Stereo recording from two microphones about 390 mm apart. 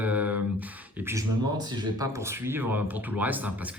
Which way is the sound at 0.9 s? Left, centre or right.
Centre.